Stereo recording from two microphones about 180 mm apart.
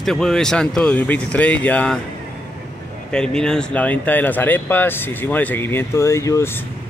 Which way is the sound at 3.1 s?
5° left (ahead or behind).